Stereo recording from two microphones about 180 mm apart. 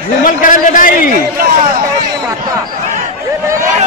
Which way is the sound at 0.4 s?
50° left (ahead or behind).